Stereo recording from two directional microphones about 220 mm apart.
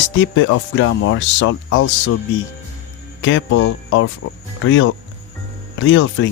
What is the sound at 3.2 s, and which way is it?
Speech, 60° left (ahead or behind).